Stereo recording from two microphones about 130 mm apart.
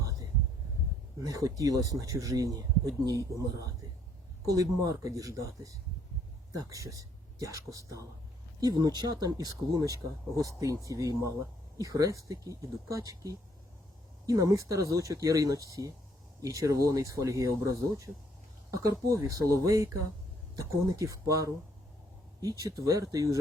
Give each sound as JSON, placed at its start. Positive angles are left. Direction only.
{"t": 0.0, "sound": "a sound", "side_deg": -25}
{"t": 1.2, "sound": "speech", "side_deg": -25}
{"t": 4.4, "sound": "speech", "side_deg": -25}
{"t": 22.6, "sound": "speech", "side_deg": -25}